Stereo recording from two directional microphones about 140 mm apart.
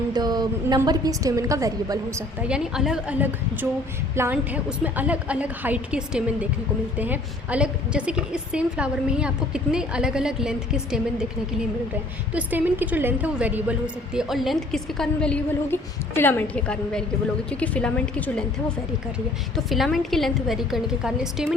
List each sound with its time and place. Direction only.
0.1 s a sound: 30° right (ahead or behind)
0.9 s a woman's voice: 25° right (ahead or behind)
2.5 s a woman's voice: 5° right (ahead or behind)
12.3 s a woman's voice: 10° right (ahead or behind); by 18.4 s 5° left (ahead or behind)
19.5 s a woman's voice: centre (ahead or behind)